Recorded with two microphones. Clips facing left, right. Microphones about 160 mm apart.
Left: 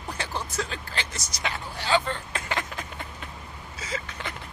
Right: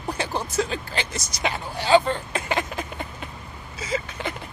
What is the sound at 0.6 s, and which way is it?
Speech, 15° right (ahead or behind).